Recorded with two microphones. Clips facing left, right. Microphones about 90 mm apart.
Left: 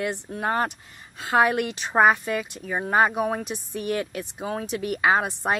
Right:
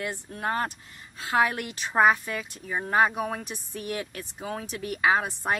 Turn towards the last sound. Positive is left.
turn(degrees=20)  # may be behind; listen again after turning